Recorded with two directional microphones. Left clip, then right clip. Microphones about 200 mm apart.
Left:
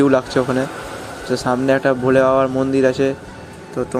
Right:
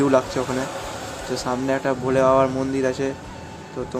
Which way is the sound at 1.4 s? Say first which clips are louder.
Left 7 dB; 20° left (ahead or behind).